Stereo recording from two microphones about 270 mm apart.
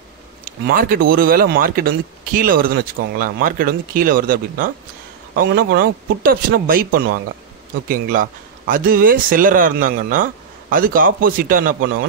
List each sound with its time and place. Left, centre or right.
0.5 s speech: right